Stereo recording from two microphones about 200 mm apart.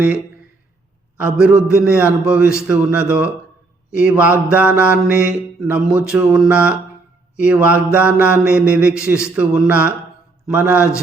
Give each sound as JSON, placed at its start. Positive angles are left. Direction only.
{"t": 1.1, "sound": "a man's voice", "side_deg": -5}
{"t": 1.6, "sound": "mantra", "side_deg": -5}